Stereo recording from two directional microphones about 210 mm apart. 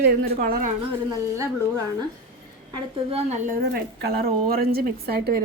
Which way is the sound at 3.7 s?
45° right (ahead or behind).